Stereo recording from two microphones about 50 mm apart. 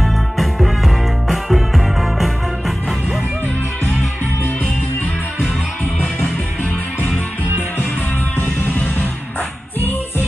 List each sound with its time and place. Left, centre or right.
0.0 s music: centre
8.4 s music: left